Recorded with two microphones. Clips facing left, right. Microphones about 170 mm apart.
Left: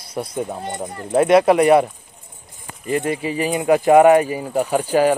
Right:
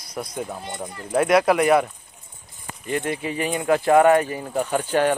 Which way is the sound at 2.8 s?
5° left (ahead or behind).